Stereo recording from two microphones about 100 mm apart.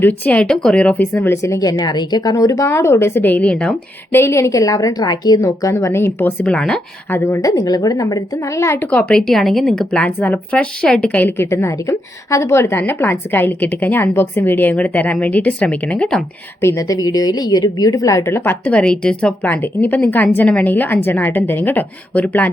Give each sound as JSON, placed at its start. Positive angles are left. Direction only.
{"t": 0.0, "sound": "a woman's voice", "side_deg": 15}
{"t": 1.7, "sound": "a woman's voice", "side_deg": 45}
{"t": 4.1, "sound": "a woman's voice", "side_deg": 25}
{"t": 5.5, "sound": "a woman's voice", "side_deg": 30}
{"t": 6.5, "sound": "a woman's voice", "side_deg": 10}
{"t": 7.1, "sound": "a woman's voice", "side_deg": 25}
{"t": 7.5, "sound": "a woman's voice", "side_deg": 40}
{"t": 16.6, "sound": "a woman's voice", "side_deg": 30}